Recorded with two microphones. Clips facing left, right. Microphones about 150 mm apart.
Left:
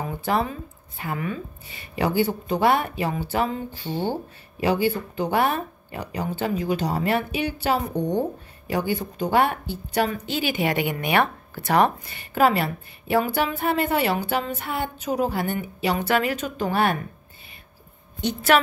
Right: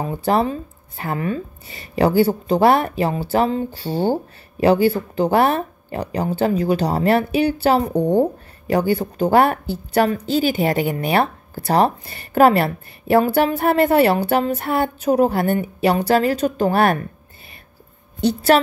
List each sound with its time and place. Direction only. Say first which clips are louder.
0.0 s speech: right 6 dB; 35° right (ahead or behind)
8.7 s a woman's voice: right 7 dB; 45° right (ahead or behind)
12.4 s a woman's voice: right 6 dB; 55° right (ahead or behind)
13.2 s a woman's voice: right 7 dB; 40° right (ahead or behind); by 16.0 s 60° right (ahead or behind)
16.0 s speech: right 5 dB; 35° right (ahead or behind)
16.7 s a woman's voice: right 3 dB; 60° right (ahead or behind)
18.2 s speech: right 5 dB; 35° right (ahead or behind)